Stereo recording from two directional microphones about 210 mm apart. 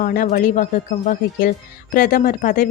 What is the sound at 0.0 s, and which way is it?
Speech, 40° left (ahead or behind).